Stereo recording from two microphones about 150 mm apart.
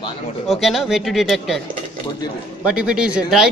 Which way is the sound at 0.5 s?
Centre (ahead or behind).